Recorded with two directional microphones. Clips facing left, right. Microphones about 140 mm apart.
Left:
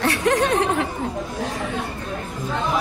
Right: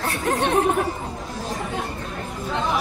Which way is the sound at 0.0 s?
75° left (ahead or behind).